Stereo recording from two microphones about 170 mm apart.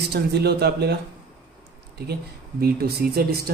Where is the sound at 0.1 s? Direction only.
75° right (ahead or behind).